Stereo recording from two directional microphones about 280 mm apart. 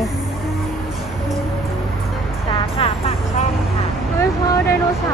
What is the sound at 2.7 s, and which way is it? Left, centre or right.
Music, left.